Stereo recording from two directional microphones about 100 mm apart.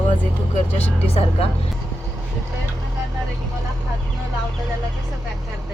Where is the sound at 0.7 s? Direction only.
90° left.